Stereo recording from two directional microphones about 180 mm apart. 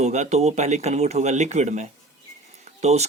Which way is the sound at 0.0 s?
40° right (ahead or behind).